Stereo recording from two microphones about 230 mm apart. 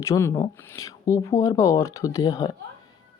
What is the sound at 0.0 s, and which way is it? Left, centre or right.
Speech, centre.